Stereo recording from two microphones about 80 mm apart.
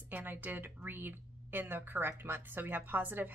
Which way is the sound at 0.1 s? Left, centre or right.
Right.